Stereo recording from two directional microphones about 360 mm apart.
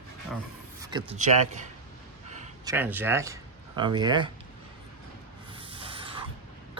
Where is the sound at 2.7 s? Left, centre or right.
Centre.